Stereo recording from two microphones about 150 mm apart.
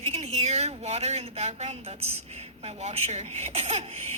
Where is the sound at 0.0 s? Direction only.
45° right (ahead or behind).